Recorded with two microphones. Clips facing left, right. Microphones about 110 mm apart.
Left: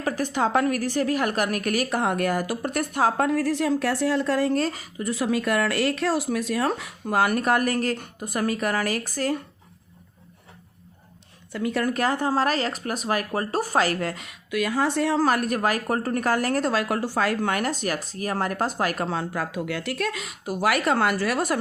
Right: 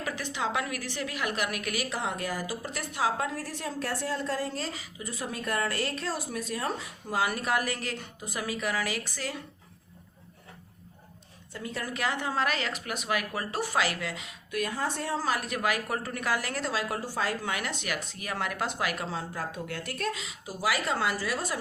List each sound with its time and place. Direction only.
0.0 s a woman's voice: 45° left (ahead or behind)
5.1 s a woman's voice: 90° left; by 9.4 s 45° left (ahead or behind)
11.5 s a woman's voice: 70° left (ahead or behind)
11.9 s a woman's voice: 40° left (ahead or behind)
14.5 s a woman's voice: 90° left; by 21.6 s 65° left (ahead or behind)